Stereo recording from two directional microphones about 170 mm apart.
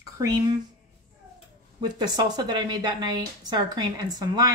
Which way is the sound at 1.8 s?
25° right (ahead or behind).